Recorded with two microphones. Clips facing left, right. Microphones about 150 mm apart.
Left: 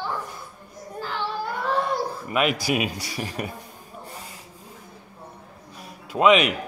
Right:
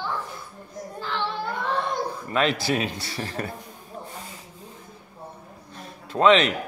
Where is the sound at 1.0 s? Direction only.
10° left (ahead or behind).